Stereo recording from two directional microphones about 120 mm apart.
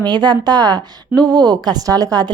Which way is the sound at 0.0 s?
35° right (ahead or behind).